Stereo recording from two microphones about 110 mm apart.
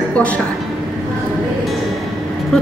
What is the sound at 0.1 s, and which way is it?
Speech, 10° left (ahead or behind).